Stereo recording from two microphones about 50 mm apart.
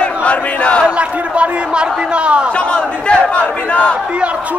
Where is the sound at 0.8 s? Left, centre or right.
Right.